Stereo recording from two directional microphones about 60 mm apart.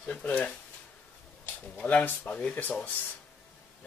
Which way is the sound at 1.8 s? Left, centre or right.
Left.